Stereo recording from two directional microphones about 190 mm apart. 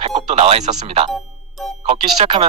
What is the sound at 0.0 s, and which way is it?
Music, 35° right (ahead or behind).